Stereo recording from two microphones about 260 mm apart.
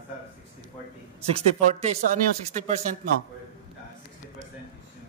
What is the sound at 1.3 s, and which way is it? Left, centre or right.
Speech, right.